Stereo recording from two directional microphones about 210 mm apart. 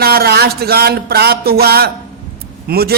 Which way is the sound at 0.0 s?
45° right (ahead or behind).